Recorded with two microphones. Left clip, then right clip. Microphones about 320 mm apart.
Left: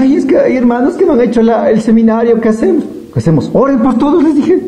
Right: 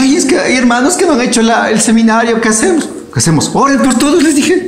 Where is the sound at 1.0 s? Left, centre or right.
Left.